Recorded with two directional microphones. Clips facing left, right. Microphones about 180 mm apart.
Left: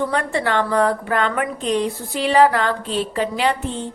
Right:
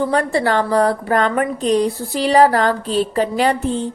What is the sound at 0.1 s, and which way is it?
A woman's voice, 35° right (ahead or behind).